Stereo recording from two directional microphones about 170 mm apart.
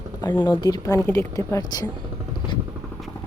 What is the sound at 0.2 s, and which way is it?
Speech, 25° left (ahead or behind).